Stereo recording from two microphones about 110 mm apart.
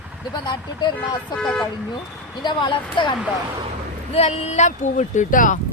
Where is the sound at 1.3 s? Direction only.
10° left (ahead or behind).